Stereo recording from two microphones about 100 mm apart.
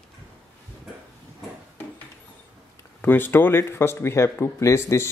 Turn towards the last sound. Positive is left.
turn(degrees=30)  # may be behind; listen again after turning